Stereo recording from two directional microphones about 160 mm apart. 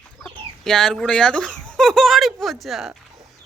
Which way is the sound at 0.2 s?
5° left (ahead or behind).